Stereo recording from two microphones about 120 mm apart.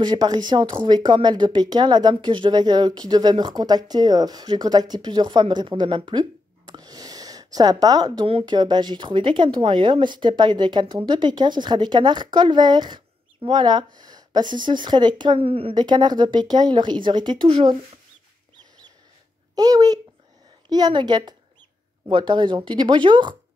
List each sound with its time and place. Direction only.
0.0 s speech: 35° right (ahead or behind)
15.3 s a woman's voice: 55° right (ahead or behind)
15.7 s speech: 40° right (ahead or behind)
19.5 s speech: 30° right (ahead or behind)